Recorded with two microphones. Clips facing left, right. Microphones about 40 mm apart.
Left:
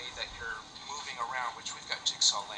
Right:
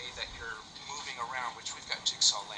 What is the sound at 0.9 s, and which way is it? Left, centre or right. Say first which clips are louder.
Speech: even; left.